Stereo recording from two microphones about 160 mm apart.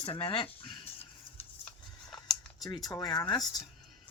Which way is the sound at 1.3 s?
5° left (ahead or behind).